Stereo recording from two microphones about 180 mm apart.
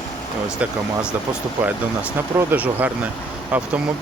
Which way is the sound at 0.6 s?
10° right (ahead or behind).